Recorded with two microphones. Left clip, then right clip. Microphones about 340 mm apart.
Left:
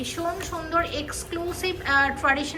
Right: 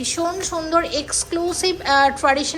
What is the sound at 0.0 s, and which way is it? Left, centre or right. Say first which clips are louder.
A woman's voice: right 6 dB; centre.